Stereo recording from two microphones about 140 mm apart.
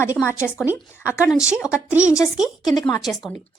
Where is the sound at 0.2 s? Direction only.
Centre (ahead or behind).